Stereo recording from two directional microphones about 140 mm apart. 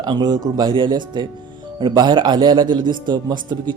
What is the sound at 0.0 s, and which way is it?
Speech, 30° right (ahead or behind).